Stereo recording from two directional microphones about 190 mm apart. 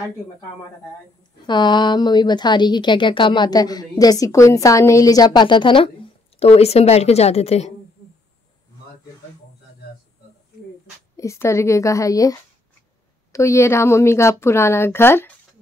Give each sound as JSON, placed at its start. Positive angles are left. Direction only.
{"t": 1.4, "sound": "a woman's voice", "side_deg": 25}
{"t": 11.1, "sound": "a woman's voice", "side_deg": 15}